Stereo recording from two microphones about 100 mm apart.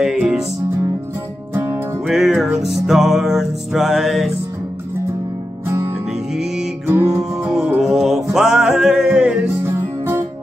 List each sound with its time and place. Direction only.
0.0 s music: 5° right (ahead or behind)
1.5 s music: 25° right (ahead or behind)
2.0 s music: 5° right (ahead or behind)
6.9 s music: 30° right (ahead or behind)
7.5 s music: 15° right (ahead or behind)
7.8 s music: 5° right (ahead or behind)
9.6 s music: 25° right (ahead or behind)